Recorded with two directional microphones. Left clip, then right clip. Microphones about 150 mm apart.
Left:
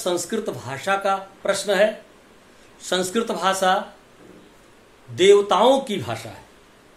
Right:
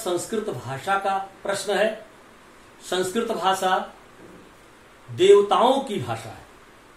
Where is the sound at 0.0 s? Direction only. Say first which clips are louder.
Left 2 dB; 45° left (ahead or behind).